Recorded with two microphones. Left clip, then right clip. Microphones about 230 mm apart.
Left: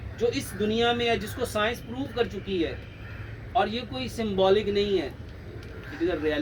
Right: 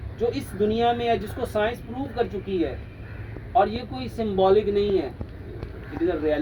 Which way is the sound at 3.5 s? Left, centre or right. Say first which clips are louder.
Right 4 dB; centre.